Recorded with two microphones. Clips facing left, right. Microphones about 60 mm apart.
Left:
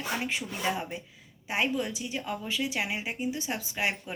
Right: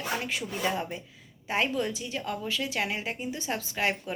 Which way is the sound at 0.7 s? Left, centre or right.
Centre.